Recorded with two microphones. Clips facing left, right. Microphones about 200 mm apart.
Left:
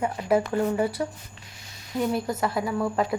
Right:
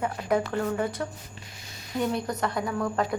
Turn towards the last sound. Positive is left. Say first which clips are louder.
# left 2 dB
turn(degrees=5)  # may be behind; listen again after turning